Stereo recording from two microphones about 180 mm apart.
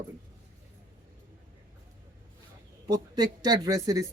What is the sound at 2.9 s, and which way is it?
Speech, 20° right (ahead or behind).